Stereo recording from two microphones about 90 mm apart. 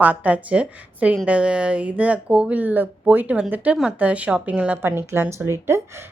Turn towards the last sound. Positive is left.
turn(degrees=-30)  # may be behind; listen again after turning